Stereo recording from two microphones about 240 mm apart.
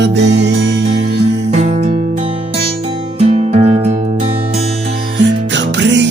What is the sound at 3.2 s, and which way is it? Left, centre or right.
Music, right.